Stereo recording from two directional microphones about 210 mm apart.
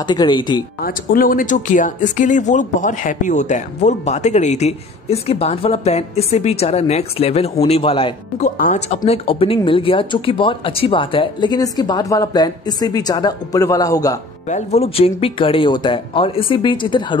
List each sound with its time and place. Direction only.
0.0 s speech: 20° left (ahead or behind)
0.8 s speech: 45° left (ahead or behind); by 14.1 s 15° left (ahead or behind)
14.5 s speech: 30° left (ahead or behind)